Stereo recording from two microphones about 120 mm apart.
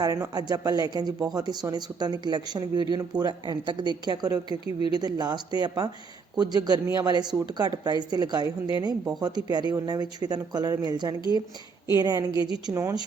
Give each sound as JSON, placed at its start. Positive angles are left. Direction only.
{"t": 0.0, "sound": "speech", "side_deg": -30}
{"t": 12.7, "sound": "speech", "side_deg": -25}